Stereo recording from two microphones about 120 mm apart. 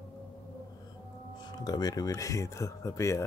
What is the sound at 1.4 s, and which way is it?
Speech, 35° left (ahead or behind).